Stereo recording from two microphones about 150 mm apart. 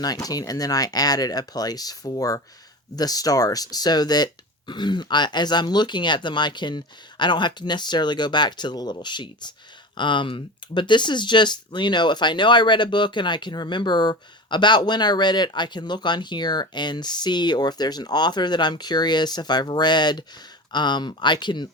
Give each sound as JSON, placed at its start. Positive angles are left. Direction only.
{"t": 0.0, "sound": "speech", "side_deg": 25}